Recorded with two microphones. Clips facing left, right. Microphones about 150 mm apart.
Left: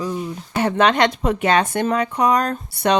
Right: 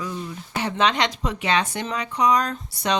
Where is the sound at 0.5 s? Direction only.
55° left (ahead or behind).